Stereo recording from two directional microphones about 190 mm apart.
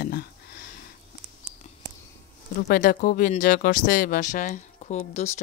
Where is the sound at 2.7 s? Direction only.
45° left (ahead or behind).